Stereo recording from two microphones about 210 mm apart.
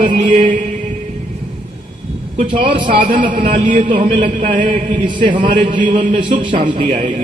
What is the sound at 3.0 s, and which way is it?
A man's voice, 40° right (ahead or behind).